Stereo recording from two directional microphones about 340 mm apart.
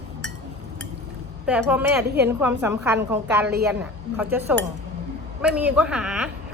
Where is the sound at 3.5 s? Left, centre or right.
Right.